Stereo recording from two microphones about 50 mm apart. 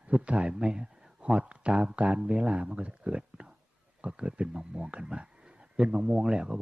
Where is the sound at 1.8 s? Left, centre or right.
Right.